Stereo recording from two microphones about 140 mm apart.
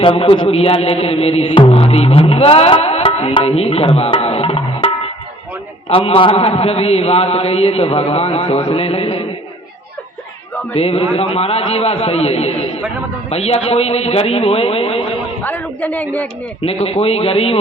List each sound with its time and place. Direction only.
0.0 s music: 40° left (ahead or behind)
5.9 s a man's voice: 40° left (ahead or behind)
10.8 s a man's voice: 45° left (ahead or behind)
15.4 s a man's voice: 10° left (ahead or behind)
16.6 s a man's voice: 45° left (ahead or behind)